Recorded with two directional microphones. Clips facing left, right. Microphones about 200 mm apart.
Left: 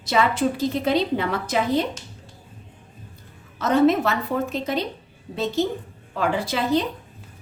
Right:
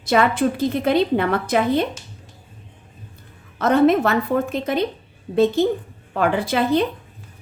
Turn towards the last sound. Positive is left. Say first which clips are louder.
# right 4 dB
turn(degrees=-55)  # may be behind; listen again after turning